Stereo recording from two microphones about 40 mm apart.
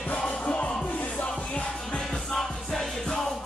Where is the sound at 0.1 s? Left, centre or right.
Left.